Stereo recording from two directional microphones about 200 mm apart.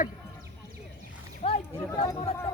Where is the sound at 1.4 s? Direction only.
30° left (ahead or behind).